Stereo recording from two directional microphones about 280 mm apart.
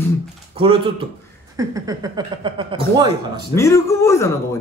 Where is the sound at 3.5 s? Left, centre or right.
Centre.